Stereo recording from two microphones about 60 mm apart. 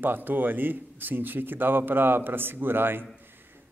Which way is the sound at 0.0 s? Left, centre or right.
Right.